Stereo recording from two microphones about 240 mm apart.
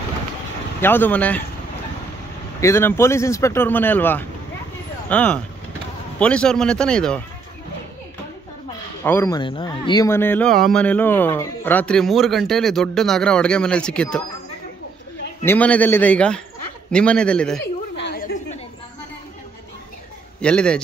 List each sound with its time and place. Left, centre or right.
0.7 s speech: centre
2.6 s speech: centre
9.0 s speech: centre
15.4 s speech: centre
17.9 s a sound: left
20.3 s speech: centre